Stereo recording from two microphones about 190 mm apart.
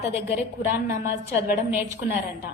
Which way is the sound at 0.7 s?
45° right (ahead or behind).